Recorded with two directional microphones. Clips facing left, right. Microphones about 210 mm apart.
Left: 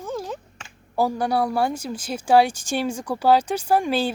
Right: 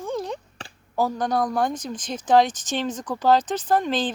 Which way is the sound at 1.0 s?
10° left (ahead or behind).